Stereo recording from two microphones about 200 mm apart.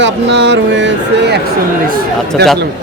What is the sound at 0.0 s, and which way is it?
Speech, 60° right (ahead or behind).